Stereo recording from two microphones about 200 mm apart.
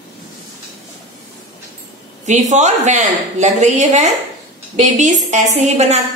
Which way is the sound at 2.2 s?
35° right (ahead or behind).